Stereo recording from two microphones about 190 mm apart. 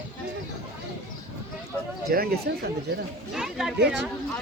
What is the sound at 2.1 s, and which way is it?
Speech, 55° right (ahead or behind).